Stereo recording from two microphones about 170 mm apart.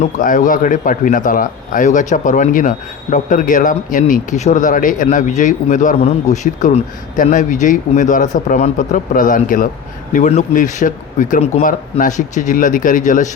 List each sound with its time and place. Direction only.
0.0 s speech: 50° left (ahead or behind)